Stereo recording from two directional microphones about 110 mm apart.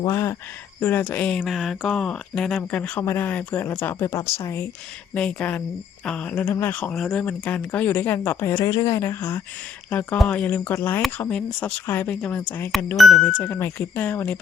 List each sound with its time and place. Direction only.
0.0 s speech: 25° left (ahead or behind)
5.1 s speech: 10° left (ahead or behind); by 9.4 s 25° left (ahead or behind)
9.9 s speech: 15° left (ahead or behind)
11.3 s speech: 5° left (ahead or behind)
13.0 s speech: centre (ahead or behind)
13.2 s speech: 15° left (ahead or behind)